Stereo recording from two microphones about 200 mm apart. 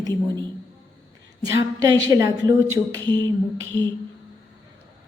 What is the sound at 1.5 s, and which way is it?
Speech, 15° right (ahead or behind).